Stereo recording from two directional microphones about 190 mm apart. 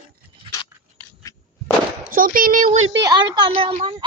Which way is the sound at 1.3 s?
20° left (ahead or behind).